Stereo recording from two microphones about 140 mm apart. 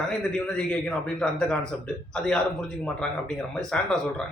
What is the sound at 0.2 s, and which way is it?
A man's voice, 5° left (ahead or behind).